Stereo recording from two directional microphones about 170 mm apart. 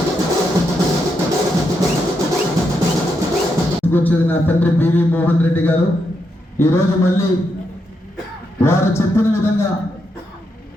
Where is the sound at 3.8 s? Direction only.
10° left (ahead or behind).